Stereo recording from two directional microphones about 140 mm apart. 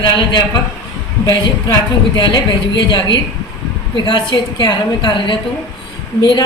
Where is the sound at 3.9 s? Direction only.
35° left (ahead or behind).